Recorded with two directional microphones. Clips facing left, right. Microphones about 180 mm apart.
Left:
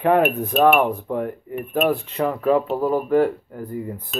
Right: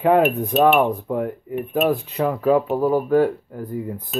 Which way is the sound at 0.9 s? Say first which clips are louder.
Right 1 dB; 5° right (ahead or behind).